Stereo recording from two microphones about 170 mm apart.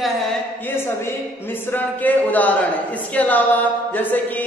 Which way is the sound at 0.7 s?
15° left (ahead or behind).